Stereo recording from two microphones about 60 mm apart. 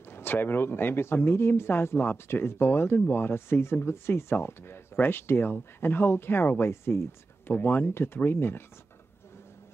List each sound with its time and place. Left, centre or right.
0.1 s speech: left